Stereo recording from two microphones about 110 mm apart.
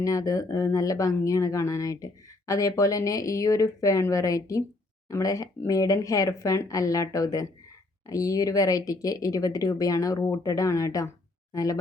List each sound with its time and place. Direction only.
0.0 s speech: 30° left (ahead or behind)